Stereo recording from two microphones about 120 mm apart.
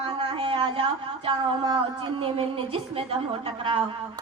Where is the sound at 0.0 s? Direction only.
45° right (ahead or behind).